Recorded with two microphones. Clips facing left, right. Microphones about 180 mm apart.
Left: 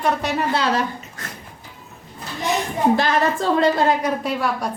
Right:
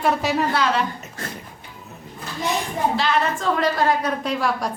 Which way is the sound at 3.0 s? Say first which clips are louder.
Left 1 dB; 45° left (ahead or behind).